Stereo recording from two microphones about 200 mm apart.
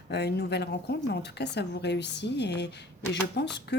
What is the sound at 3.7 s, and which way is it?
Speech, 60° left (ahead or behind).